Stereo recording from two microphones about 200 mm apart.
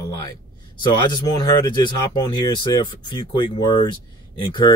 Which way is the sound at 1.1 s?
20° left (ahead or behind).